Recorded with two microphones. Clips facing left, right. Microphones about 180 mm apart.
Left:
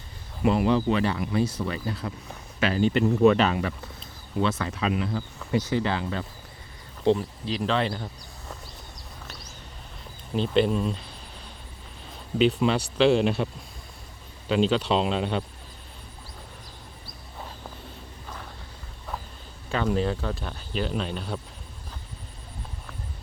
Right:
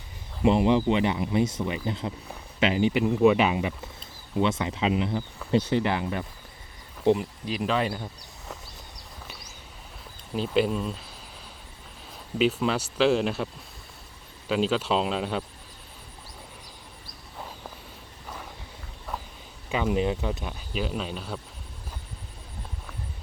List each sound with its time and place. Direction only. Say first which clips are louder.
0.4 s speech: right 1 dB; 20° right (ahead or behind)
5.4 s a sound: right 3 dB; 10° right (ahead or behind)
5.7 s speech: right 1 dB; 20° right (ahead or behind)
10.3 s speech: left 2 dB; 5° right (ahead or behind)
12.4 s speech: left 2 dB; centre (ahead or behind)
19.7 s speech: even; 10° right (ahead or behind)